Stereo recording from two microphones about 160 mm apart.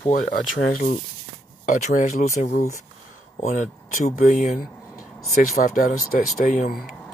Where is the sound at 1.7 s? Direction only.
50° left (ahead or behind).